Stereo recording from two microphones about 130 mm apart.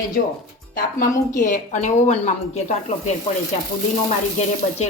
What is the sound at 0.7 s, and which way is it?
A woman's voice, 85° left.